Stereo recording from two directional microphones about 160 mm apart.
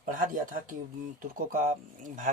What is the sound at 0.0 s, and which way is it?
Speech, 55° right (ahead or behind).